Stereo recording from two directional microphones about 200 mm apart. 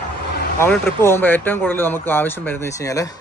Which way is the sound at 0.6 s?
10° left (ahead or behind).